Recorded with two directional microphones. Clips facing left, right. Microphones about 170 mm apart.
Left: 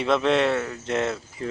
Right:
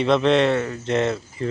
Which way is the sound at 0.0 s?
5° left (ahead or behind).